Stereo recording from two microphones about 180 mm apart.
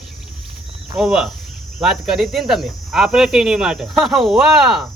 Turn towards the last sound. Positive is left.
turn(degrees=0)  # may be behind; listen again after turning